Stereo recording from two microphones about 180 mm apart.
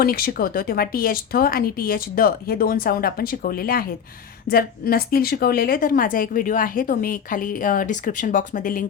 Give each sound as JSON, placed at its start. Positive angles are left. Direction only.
{"t": 0.0, "sound": "a woman's voice", "side_deg": 55}